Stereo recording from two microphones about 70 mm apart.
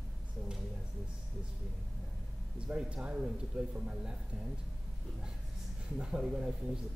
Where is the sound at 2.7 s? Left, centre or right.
Centre.